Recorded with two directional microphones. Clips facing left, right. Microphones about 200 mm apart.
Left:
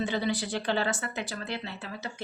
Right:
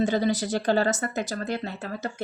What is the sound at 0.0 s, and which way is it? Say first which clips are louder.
Speech: right 6 dB; 40° right (ahead or behind).